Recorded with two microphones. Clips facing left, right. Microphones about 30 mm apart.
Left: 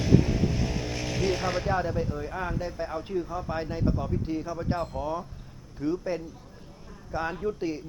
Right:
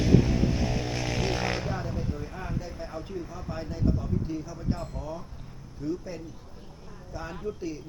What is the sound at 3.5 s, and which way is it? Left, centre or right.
Speech, left.